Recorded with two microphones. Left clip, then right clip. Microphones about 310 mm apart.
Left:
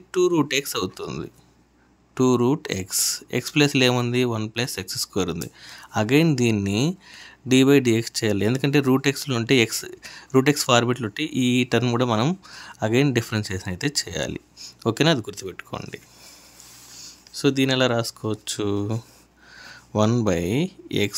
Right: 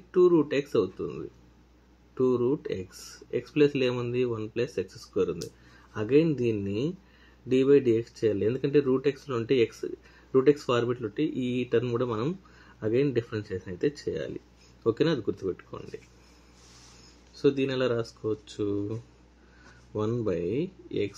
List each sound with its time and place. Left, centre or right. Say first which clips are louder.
0.1 s speech: left 2 dB; left
17.4 s speech: left 5 dB; left